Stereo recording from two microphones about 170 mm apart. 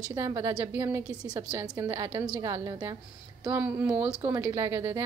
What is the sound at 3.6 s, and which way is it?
A woman's voice, 10° right (ahead or behind).